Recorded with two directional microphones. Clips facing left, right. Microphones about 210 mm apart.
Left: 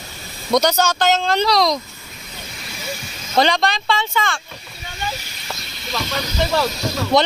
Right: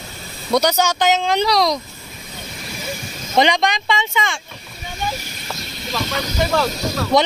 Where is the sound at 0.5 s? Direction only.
10° right (ahead or behind).